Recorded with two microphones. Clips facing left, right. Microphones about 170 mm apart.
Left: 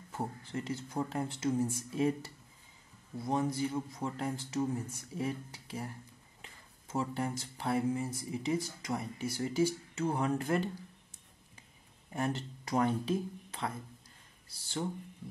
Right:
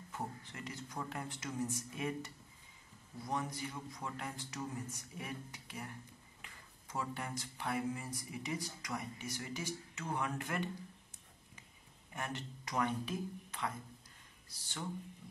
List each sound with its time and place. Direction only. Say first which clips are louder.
0.1 s speech: left 7 dB; 30° left (ahead or behind)
12.1 s speech: left 8 dB; 30° left (ahead or behind)